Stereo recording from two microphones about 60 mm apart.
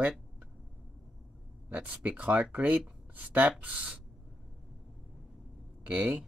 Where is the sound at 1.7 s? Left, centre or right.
Right.